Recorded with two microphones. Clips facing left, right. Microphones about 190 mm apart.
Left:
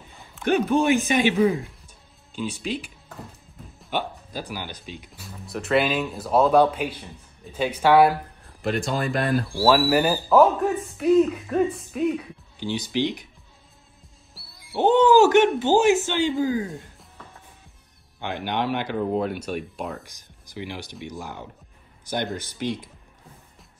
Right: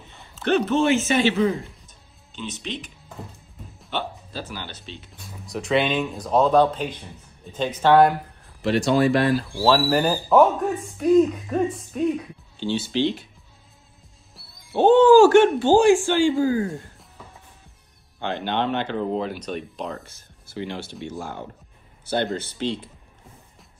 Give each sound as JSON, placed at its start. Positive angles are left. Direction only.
{"t": 0.3, "sound": "speech", "side_deg": 10}
{"t": 3.9, "sound": "speech", "side_deg": 15}
{"t": 5.1, "sound": "speech", "side_deg": 0}
{"t": 9.6, "sound": "speech", "side_deg": 5}
{"t": 12.5, "sound": "speech", "side_deg": 15}
{"t": 14.4, "sound": "music", "side_deg": 0}
{"t": 14.9, "sound": "speech", "side_deg": 20}
{"t": 18.2, "sound": "speech", "side_deg": 15}